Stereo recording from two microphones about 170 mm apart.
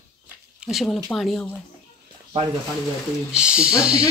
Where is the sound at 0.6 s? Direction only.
Centre (ahead or behind).